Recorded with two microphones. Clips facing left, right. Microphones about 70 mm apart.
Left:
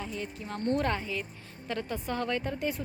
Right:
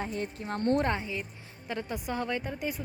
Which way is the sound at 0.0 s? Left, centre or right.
Right.